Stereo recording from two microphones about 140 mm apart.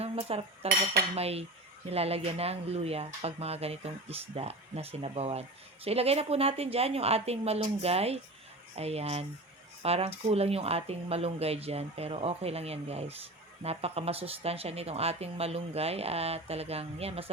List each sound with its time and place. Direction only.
0.0 s cutlery: 45° right (ahead or behind)
1.1 s speech: 45° right (ahead or behind)